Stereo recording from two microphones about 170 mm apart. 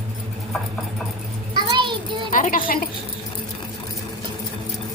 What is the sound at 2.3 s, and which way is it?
Speech, 55° left (ahead or behind).